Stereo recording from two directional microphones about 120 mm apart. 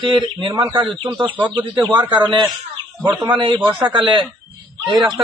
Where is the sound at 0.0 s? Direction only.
40° right (ahead or behind).